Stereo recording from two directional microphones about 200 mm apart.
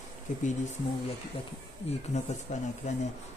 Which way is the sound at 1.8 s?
35° left (ahead or behind).